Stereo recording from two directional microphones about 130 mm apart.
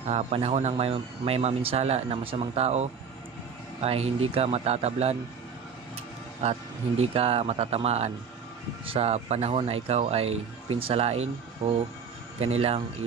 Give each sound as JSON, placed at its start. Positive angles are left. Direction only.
{"t": 0.1, "sound": "speech", "side_deg": -50}
{"t": 7.0, "sound": "speech", "side_deg": -50}